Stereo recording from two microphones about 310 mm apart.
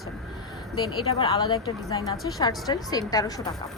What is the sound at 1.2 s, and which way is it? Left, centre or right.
A woman's voice, centre.